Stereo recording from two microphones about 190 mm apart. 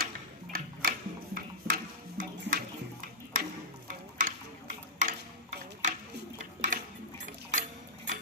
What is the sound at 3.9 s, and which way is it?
Stir, 40° right (ahead or behind).